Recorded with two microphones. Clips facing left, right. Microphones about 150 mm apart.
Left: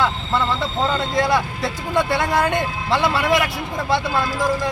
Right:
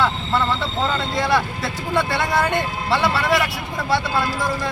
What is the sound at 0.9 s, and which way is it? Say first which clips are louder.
Speech: left 1 dB; 15° left (ahead or behind).